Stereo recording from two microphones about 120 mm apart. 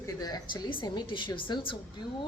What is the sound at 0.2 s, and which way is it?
A woman's voice, 35° left (ahead or behind).